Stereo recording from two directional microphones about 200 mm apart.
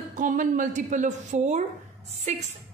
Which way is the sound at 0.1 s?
40° right (ahead or behind).